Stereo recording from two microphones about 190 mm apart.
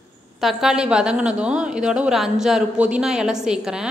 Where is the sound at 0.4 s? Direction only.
Centre (ahead or behind).